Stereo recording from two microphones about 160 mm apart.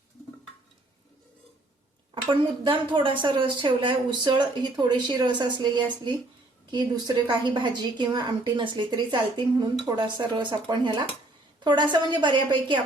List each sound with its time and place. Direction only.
2.1 s dishes: 30° right (ahead or behind)
2.6 s a woman's voice: 30° right (ahead or behind)
7.3 s a woman's voice: 30° right (ahead or behind)